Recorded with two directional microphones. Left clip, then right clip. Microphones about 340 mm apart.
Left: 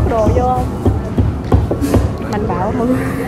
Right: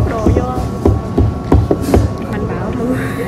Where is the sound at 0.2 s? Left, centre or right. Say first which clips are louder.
Left 2 dB; centre.